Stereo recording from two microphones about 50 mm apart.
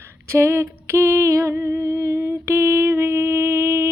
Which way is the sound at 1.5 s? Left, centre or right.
Right.